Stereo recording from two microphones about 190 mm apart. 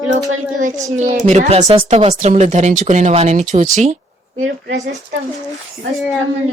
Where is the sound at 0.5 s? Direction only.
40° right (ahead or behind).